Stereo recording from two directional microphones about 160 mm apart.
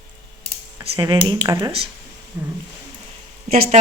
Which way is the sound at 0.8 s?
35° right (ahead or behind).